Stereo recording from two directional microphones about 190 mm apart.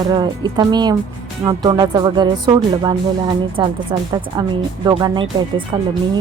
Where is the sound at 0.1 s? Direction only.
25° right (ahead or behind).